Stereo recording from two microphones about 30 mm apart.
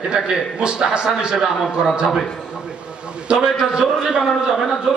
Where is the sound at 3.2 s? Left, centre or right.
Right.